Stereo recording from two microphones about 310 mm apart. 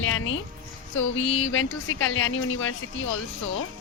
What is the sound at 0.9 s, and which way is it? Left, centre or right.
Speech, left.